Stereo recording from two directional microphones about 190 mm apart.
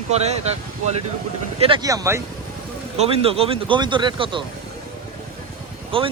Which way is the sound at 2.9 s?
30° right (ahead or behind).